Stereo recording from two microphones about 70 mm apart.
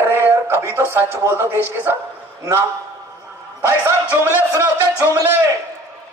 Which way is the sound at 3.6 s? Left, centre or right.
Right.